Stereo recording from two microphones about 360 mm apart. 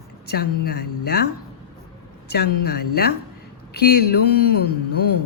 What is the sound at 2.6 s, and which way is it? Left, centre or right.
A woman's voice, left.